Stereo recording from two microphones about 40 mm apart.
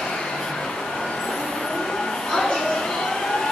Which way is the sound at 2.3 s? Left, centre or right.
Centre.